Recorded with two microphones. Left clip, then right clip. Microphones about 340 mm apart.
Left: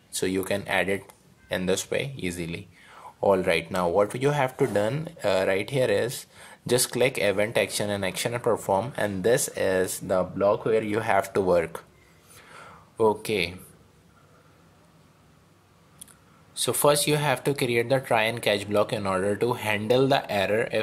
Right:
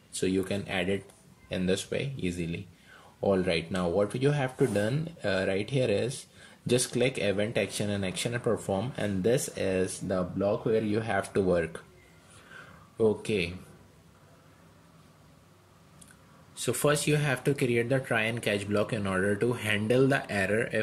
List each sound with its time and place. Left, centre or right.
0.1 s speech: centre
10.9 s speech: centre
12.9 s speech: left
13.2 s speech: centre
16.5 s speech: centre